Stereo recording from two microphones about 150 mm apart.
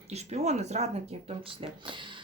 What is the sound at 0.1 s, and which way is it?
Speech, 45° right (ahead or behind).